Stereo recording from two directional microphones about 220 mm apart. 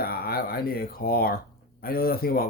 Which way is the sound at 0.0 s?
45° left (ahead or behind).